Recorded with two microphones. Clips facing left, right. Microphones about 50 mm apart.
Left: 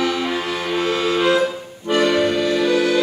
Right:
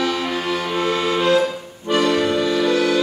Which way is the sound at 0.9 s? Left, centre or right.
Centre.